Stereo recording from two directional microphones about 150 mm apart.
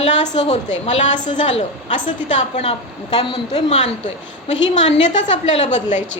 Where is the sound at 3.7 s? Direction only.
50° left (ahead or behind).